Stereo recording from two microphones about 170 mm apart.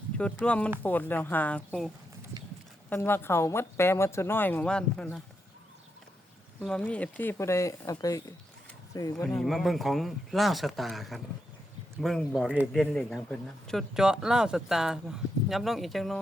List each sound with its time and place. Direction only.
0.4 s speech: 5° left (ahead or behind)
2.9 s speech: 15° left (ahead or behind)
6.6 s speech: 5° left (ahead or behind)
9.2 s speech: 5° left (ahead or behind)